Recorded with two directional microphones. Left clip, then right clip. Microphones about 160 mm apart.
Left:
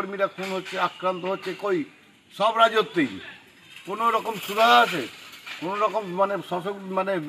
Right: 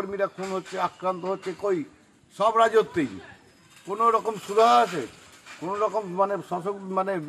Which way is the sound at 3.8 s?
10° right (ahead or behind).